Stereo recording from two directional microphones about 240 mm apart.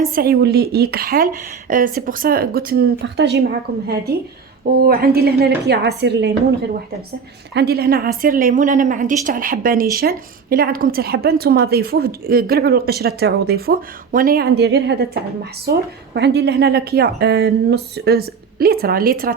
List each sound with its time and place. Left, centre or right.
0.1 s a woman's voice: right
7.5 s a woman's voice: right